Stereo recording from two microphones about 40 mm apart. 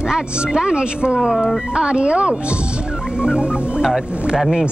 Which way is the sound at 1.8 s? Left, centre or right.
Right.